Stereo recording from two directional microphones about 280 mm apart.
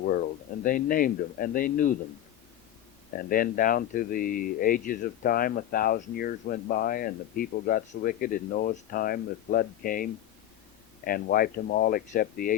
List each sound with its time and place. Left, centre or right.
0.6 s speech: left
3.2 s speech: left